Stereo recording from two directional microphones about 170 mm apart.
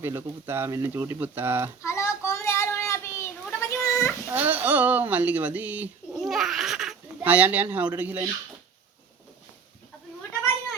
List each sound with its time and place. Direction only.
0.0 s speech: 15° right (ahead or behind)
1.8 s child singing: 15° left (ahead or behind)
4.3 s speech: 10° right (ahead or behind)